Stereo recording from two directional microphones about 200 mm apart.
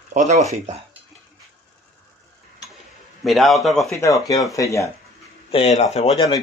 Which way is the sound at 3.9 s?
15° left (ahead or behind).